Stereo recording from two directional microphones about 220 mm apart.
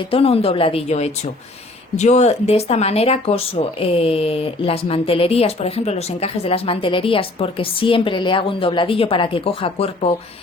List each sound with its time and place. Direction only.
0.1 s speech: 25° left (ahead or behind)